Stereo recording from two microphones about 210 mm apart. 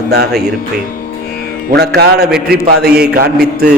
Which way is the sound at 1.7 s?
50° right (ahead or behind).